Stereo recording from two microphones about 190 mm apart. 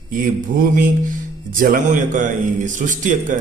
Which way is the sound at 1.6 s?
45° right (ahead or behind).